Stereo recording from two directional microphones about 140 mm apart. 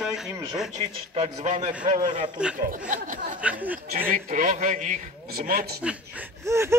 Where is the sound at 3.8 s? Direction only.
90° right.